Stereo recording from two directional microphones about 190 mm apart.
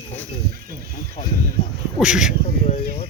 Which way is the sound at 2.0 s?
5° right (ahead or behind).